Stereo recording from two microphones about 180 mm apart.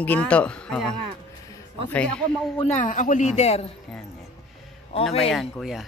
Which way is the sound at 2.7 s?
45° left (ahead or behind).